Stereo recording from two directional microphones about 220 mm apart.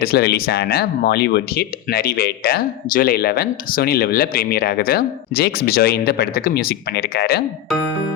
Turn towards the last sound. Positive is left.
turn(degrees=45)  # may be behind; listen again after turning